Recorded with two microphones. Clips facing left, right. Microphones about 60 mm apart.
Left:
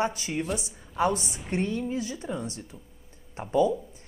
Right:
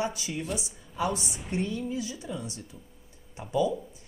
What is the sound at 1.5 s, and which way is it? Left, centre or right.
Speech, left.